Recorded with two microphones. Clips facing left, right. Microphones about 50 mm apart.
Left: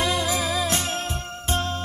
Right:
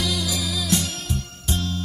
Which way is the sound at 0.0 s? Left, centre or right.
Left.